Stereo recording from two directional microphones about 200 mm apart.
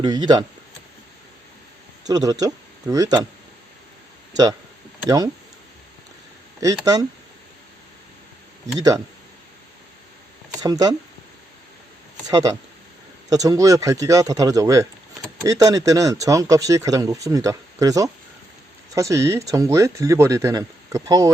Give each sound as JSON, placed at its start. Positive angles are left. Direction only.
{"t": 0.0, "sound": "speech", "side_deg": -20}
{"t": 2.0, "sound": "speech", "side_deg": -20}
{"t": 5.0, "sound": "speech", "side_deg": -15}
{"t": 10.6, "sound": "speech", "side_deg": -20}
{"t": 12.3, "sound": "speech", "side_deg": -15}